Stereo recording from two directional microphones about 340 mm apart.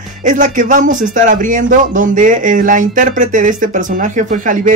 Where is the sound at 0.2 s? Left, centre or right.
Right.